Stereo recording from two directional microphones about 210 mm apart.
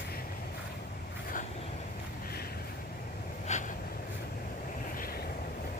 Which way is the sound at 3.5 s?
35° left (ahead or behind).